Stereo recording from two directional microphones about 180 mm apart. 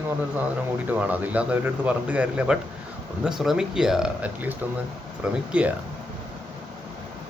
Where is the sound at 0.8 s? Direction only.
10° right (ahead or behind).